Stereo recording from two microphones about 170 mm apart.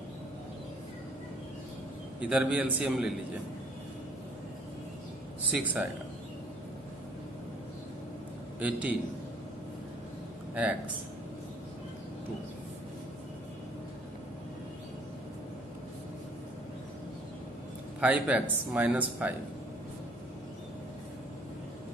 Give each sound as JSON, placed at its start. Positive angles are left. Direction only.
{"t": 2.1, "sound": "a man's voice", "side_deg": -5}
{"t": 5.5, "sound": "a man's voice", "side_deg": -5}
{"t": 8.5, "sound": "a man's voice", "side_deg": -10}
{"t": 10.5, "sound": "speech", "side_deg": -10}
{"t": 18.0, "sound": "a man's voice", "side_deg": -10}